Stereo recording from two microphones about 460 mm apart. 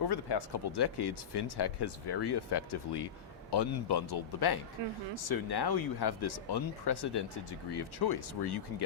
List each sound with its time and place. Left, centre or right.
0.1 s speech: left
3.5 s speech: left